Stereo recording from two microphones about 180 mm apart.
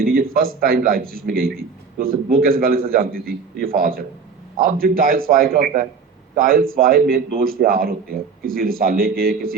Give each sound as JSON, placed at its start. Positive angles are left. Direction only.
{"t": 0.1, "sound": "a man's voice", "side_deg": -55}